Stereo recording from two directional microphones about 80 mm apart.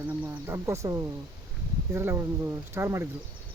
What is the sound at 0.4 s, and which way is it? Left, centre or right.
Speech, right.